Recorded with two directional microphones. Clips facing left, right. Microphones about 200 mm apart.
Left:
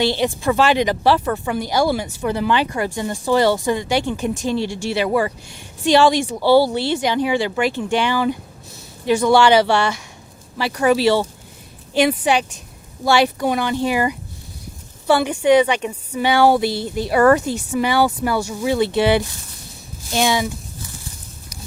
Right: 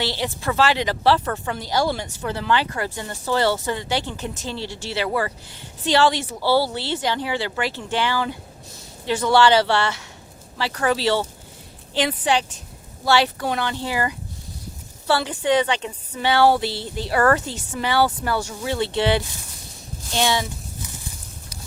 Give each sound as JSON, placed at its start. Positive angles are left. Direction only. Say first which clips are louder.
{"t": 0.0, "sound": "speech", "louder": "left 7 dB", "side_deg": 15}